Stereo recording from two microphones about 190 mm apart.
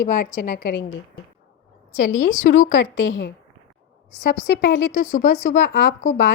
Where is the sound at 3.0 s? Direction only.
90° left.